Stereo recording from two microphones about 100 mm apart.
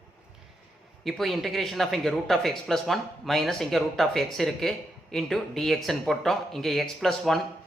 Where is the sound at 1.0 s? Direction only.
Centre (ahead or behind).